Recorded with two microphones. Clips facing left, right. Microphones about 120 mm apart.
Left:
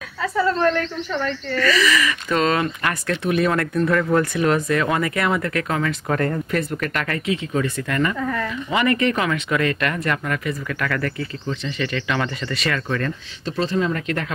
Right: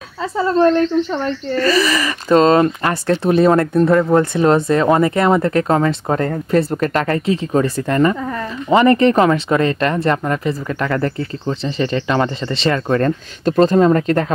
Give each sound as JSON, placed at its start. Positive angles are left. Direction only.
{"t": 0.2, "sound": "speech", "side_deg": -25}
{"t": 12.8, "sound": "speech", "side_deg": -40}